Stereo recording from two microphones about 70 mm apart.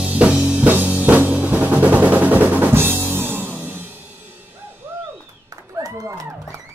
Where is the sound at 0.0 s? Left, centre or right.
Centre.